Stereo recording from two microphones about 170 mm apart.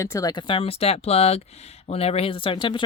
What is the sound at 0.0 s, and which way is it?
Speech, 20° left (ahead or behind).